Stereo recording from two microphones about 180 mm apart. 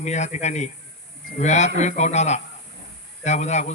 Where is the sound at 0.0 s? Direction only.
40° left (ahead or behind).